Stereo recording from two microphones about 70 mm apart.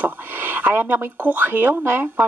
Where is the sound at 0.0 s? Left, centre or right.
Right.